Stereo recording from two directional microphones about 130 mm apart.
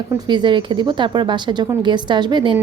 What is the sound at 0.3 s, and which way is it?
A woman's voice, 35° right (ahead or behind).